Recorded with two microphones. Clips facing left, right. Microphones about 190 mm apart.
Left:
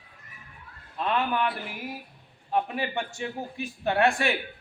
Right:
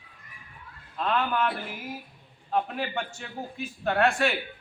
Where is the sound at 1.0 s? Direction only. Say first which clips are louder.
Even; 15° left (ahead or behind).